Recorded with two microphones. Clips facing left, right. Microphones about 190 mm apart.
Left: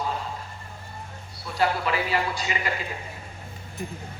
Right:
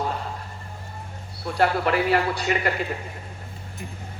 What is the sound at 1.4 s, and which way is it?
A woman's voice, 55° right (ahead or behind).